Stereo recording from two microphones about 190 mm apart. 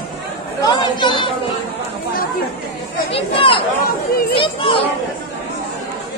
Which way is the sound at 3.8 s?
55° left (ahead or behind).